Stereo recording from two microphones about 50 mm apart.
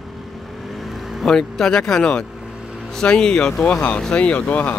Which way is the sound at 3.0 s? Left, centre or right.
Centre.